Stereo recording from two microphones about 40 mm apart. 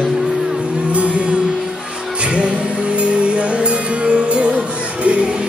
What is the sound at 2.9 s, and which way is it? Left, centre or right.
Music, right.